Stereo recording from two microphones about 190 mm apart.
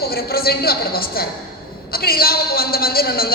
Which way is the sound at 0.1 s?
55° left (ahead or behind).